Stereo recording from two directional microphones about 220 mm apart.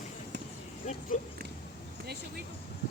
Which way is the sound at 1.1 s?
35° left (ahead or behind).